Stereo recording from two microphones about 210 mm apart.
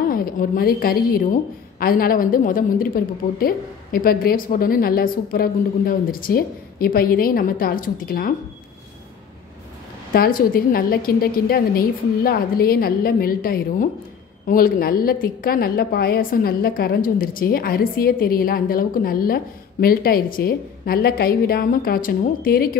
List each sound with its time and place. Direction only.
0.1 s a woman's voice: 45° left (ahead or behind)
10.1 s a woman's voice: 45° left (ahead or behind)